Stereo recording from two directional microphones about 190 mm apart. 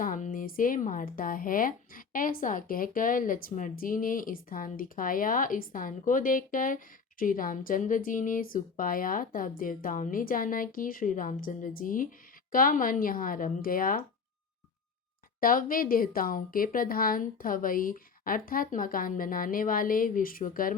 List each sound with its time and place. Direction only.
0.0 s speech: 45° left (ahead or behind)
15.4 s speech: 50° left (ahead or behind)